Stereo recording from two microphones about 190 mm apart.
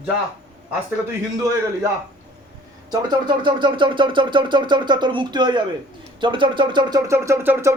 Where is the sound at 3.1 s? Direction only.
25° right (ahead or behind).